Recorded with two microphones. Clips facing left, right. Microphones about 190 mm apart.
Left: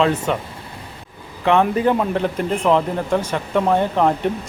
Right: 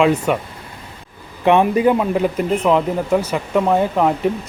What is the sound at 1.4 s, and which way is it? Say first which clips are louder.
Speech: right 3 dB; 15° right (ahead or behind).